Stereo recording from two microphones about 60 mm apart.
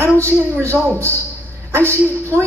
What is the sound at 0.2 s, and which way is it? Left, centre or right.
Speech, right.